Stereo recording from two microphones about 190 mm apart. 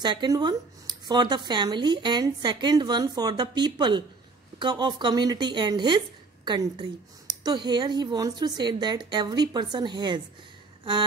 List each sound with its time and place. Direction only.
0.0 s a woman's voice: 25° right (ahead or behind)